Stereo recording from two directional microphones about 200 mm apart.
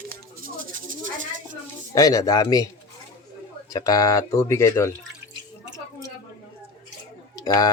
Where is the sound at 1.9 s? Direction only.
15° left (ahead or behind).